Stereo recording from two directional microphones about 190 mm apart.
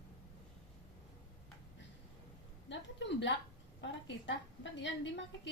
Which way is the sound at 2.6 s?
70° left (ahead or behind).